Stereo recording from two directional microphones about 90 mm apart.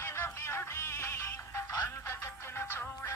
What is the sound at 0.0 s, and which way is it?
Music, 30° left (ahead or behind).